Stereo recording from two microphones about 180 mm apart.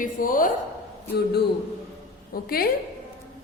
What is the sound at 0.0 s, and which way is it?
Speech, 50° left (ahead or behind).